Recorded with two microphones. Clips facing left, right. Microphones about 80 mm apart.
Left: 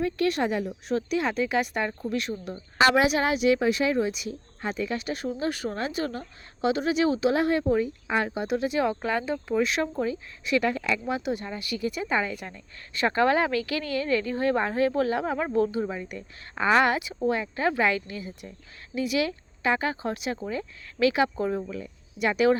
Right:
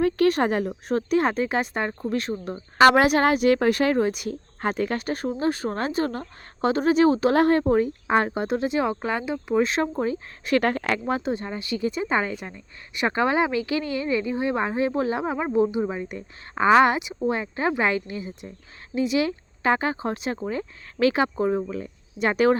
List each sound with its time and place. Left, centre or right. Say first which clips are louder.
0.0 s a woman's voice: right 5 dB; right
2.7 s a woman's voice: right 5 dB; right; by 9.6 s centre
9.6 s a woman's voice: right 4 dB; right